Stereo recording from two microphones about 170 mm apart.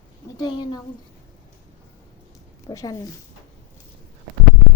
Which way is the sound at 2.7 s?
20° left (ahead or behind).